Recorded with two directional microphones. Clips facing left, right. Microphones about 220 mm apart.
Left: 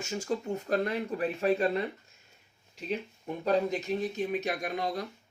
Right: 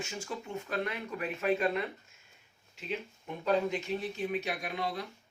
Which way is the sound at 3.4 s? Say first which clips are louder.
Left 2 dB; 40° left (ahead or behind).